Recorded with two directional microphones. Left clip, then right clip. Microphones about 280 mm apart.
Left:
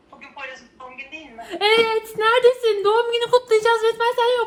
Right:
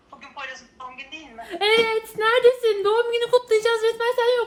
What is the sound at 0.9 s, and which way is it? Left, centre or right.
Speech, centre.